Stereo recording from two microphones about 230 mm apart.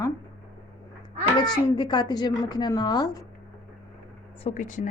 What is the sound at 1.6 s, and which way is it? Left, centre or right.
A woman's voice, centre.